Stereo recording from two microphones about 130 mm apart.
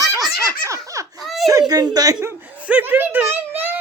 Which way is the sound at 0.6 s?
25° right (ahead or behind).